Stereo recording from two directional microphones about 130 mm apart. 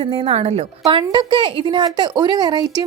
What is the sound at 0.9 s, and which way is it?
A woman's voice, 40° right (ahead or behind).